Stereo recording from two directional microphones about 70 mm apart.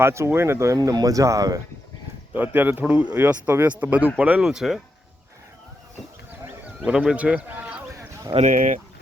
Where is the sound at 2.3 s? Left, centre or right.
Right.